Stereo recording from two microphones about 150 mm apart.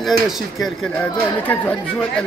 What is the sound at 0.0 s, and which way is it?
Speech, centre (ahead or behind).